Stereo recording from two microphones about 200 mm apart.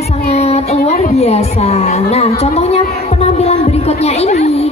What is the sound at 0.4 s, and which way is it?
A woman's voice, 30° left (ahead or behind).